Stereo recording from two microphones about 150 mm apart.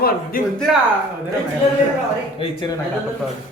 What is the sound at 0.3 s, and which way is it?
Speech, 70° left (ahead or behind).